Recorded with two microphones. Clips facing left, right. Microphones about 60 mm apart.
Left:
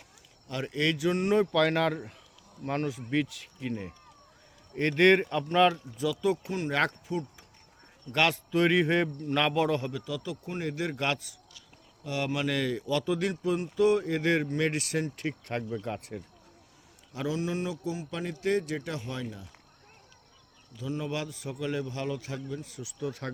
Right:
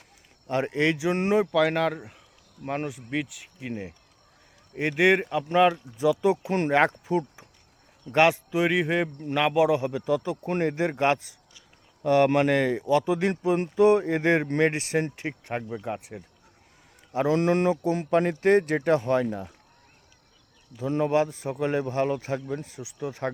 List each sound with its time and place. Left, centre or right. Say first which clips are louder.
0.4 s a man's voice: right 5 dB; right
1.5 s a man's voice: right 2 dB; centre; by 8.5 s right
8.5 s speech: right 1 dB; centre
9.9 s a man's voice: right 9 dB; right
12.0 s a man's voice: right 11 dB; right; by 16.2 s centre
17.1 s a man's voice: right 9 dB; right
17.3 s speech: right 11 dB; right
20.7 s a man's voice: right 10 dB; right